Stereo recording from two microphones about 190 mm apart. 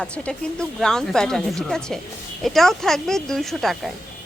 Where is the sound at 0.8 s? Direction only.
5° left (ahead or behind).